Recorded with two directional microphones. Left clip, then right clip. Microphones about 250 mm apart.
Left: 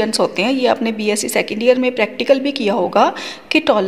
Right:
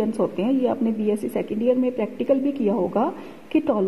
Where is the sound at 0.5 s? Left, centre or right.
Centre.